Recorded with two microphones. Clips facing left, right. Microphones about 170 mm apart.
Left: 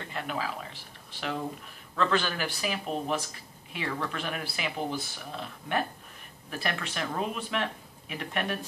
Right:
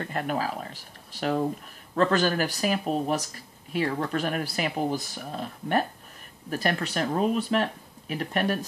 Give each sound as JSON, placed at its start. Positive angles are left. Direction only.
{"t": 0.0, "sound": "speech", "side_deg": -45}